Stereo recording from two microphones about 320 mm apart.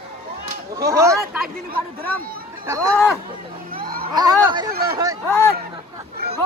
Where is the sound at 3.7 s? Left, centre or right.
Right.